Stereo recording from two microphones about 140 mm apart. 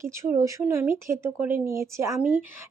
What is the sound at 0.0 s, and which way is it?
Speech, 20° right (ahead or behind).